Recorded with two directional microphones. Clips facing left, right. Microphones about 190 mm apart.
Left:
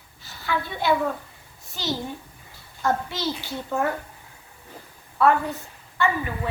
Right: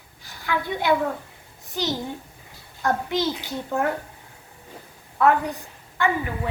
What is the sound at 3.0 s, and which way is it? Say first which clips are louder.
Speech: right 4 dB; 20° right (ahead or behind).